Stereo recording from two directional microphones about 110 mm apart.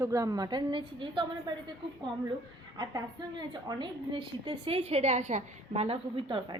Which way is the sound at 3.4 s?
40° right (ahead or behind).